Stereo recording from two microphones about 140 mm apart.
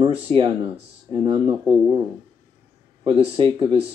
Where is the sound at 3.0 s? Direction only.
40° right (ahead or behind).